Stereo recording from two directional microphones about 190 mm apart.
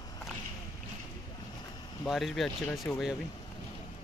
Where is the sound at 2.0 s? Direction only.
Centre (ahead or behind).